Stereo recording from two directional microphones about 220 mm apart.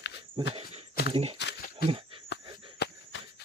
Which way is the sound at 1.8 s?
25° right (ahead or behind).